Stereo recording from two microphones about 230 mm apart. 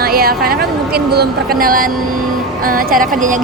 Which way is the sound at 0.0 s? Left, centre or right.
Right.